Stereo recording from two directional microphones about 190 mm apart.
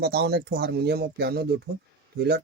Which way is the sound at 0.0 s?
60° right (ahead or behind).